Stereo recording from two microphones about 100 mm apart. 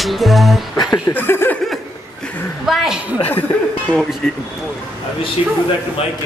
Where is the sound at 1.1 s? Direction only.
20° left (ahead or behind).